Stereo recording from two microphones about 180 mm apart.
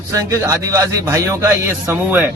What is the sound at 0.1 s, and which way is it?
A man's voice, 15° right (ahead or behind).